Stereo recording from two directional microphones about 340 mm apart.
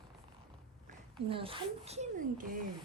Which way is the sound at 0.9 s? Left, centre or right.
Centre.